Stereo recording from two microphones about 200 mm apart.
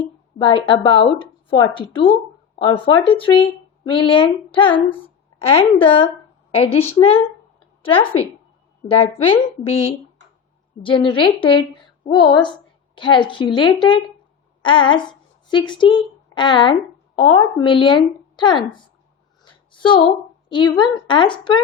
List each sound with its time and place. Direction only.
0.3 s a woman's voice: 25° left (ahead or behind)
19.4 s a sound: 25° left (ahead or behind)
20.5 s a woman's voice: 25° left (ahead or behind)